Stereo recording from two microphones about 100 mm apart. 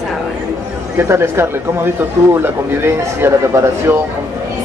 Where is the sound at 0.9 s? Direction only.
25° right (ahead or behind).